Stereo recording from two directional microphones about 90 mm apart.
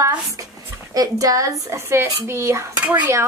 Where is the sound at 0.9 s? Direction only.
40° right (ahead or behind).